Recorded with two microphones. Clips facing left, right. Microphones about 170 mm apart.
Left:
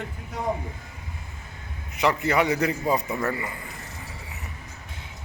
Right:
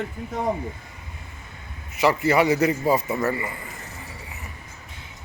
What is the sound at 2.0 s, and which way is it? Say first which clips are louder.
A man's voice: right 3 dB; 5° right (ahead or behind).